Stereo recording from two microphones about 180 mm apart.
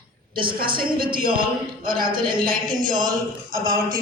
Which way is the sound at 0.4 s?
55° right (ahead or behind).